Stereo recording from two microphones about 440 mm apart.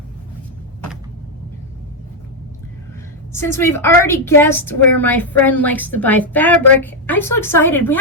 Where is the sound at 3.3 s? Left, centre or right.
Centre.